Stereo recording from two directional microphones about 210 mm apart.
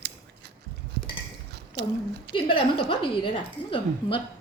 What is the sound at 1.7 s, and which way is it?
Speech, 55° right (ahead or behind).